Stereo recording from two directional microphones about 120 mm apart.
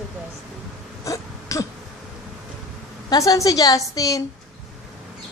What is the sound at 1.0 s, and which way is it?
Throat clearing, 25° left (ahead or behind).